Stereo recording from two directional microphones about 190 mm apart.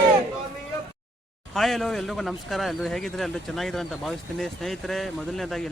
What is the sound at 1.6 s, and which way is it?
Speech, centre (ahead or behind).